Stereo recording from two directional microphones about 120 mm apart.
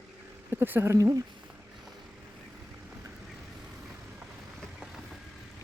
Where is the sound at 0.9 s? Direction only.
30° right (ahead or behind).